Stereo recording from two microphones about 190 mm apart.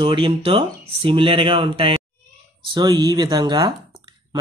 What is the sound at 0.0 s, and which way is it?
Speech, 30° right (ahead or behind).